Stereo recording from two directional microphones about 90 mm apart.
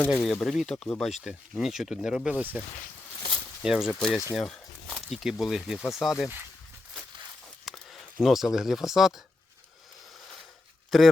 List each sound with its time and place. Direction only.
0.1 s speech: centre (ahead or behind); by 2.6 s 15° right (ahead or behind)
3.3 s a sound: 5° right (ahead or behind)
3.9 s speech: 5° left (ahead or behind)
7.7 s a sound: centre (ahead or behind)
8.2 s speech: 5° right (ahead or behind)
10.9 s speech: centre (ahead or behind)